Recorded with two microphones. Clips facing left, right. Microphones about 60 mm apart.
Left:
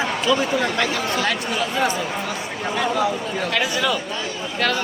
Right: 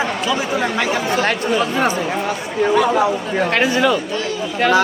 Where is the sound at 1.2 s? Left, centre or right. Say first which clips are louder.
Right 6 dB; right.